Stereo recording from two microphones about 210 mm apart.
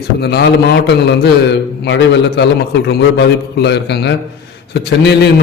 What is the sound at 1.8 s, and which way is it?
A man's voice, 55° left (ahead or behind).